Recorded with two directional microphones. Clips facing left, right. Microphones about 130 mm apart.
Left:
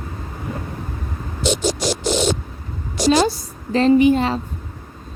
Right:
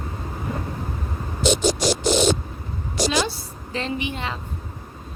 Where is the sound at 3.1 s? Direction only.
40° left (ahead or behind).